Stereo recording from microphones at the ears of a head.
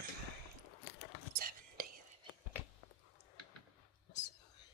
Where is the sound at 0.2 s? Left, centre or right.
Left.